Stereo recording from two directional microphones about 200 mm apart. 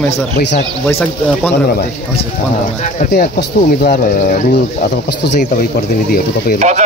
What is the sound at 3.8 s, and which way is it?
Speech, 50° left (ahead or behind).